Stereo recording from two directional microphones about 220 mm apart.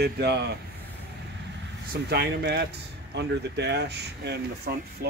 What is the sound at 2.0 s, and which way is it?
Speech, 45° right (ahead or behind).